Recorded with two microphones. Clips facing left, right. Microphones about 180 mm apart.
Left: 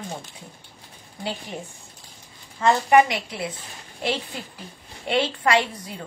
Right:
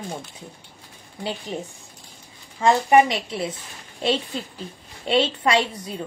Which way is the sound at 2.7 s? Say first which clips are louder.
Right 1 dB; 15° right (ahead or behind).